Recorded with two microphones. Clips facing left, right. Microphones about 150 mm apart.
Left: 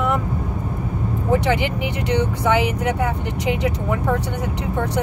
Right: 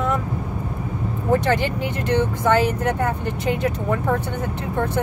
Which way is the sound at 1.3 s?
15° left (ahead or behind).